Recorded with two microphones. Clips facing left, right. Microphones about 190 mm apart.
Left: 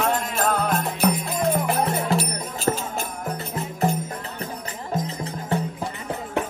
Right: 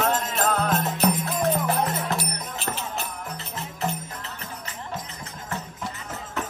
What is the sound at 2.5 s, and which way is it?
Music, 45° left (ahead or behind).